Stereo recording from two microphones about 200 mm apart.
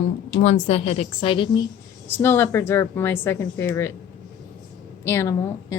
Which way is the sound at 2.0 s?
10° left (ahead or behind).